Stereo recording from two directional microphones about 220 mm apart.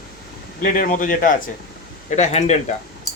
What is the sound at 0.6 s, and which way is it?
Speech, 40° left (ahead or behind).